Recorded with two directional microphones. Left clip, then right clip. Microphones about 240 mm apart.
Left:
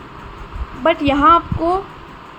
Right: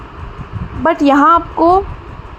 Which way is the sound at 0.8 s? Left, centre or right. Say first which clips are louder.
Right 3 dB; right.